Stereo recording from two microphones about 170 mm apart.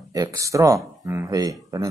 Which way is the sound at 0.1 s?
20° right (ahead or behind).